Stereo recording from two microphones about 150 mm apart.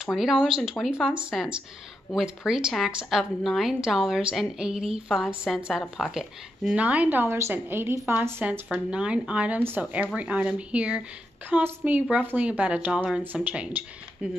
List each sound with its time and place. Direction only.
0.0 s a woman's voice: centre (ahead or behind)